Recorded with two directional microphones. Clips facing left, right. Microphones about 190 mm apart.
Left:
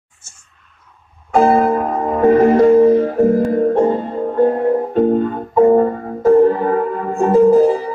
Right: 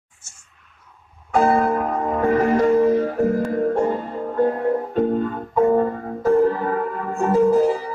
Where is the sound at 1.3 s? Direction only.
25° left (ahead or behind).